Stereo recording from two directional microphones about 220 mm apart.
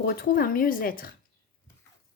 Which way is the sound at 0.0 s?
40° left (ahead or behind).